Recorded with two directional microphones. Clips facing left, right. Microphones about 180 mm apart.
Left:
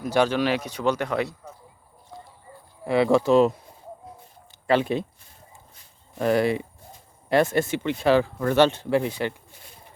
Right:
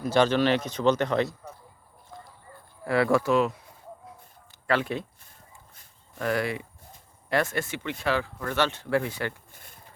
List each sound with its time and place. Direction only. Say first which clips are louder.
0.0 s speech: even; 10° left (ahead or behind)
2.0 s livestock: left 2 dB; 20° left (ahead or behind)
4.6 s speech: left 5 dB; 20° left (ahead or behind)
6.1 s speech: left 6 dB; 25° left (ahead or behind)
9.5 s pigeon: left 2 dB; 50° right (ahead or behind)